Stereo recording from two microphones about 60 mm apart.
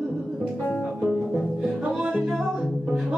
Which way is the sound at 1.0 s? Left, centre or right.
Centre.